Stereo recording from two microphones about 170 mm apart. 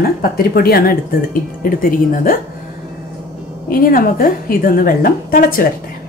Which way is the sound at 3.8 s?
55° left (ahead or behind).